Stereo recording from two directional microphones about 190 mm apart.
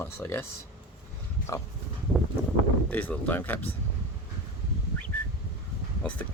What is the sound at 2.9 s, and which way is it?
Speech, 10° left (ahead or behind).